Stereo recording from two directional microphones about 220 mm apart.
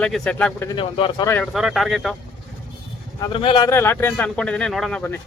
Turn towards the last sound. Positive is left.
turn(degrees=5)  # may be behind; listen again after turning